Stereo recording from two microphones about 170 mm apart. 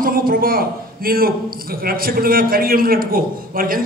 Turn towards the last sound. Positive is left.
turn(degrees=-55)  # may be behind; listen again after turning